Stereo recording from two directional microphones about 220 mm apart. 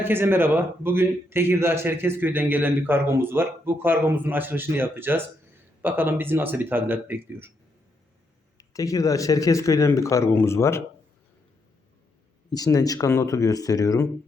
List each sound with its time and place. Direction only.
0.0 s a man's voice: 10° right (ahead or behind)
8.5 s speech: 15° left (ahead or behind)
12.5 s speech: 15° left (ahead or behind)